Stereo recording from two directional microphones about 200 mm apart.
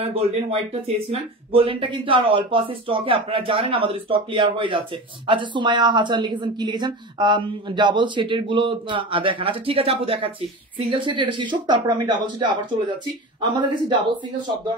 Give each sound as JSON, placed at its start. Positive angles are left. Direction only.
{"t": 0.1, "sound": "speech", "side_deg": -30}